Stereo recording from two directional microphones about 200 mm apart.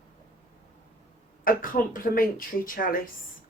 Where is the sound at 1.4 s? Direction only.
45° left (ahead or behind).